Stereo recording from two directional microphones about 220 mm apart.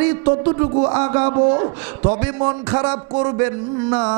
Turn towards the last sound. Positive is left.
turn(degrees=-10)  # may be behind; listen again after turning